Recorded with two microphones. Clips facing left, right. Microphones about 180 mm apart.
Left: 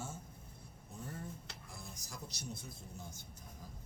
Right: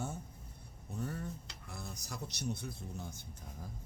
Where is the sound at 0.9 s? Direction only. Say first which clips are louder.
Right 6 dB; 70° right (ahead or behind).